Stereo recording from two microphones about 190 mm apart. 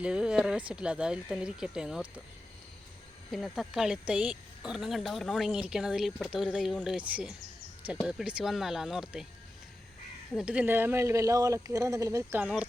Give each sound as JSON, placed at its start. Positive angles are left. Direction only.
{"t": 0.0, "sound": "speech", "side_deg": -5}
{"t": 3.3, "sound": "speech", "side_deg": 0}
{"t": 10.3, "sound": "speech", "side_deg": -5}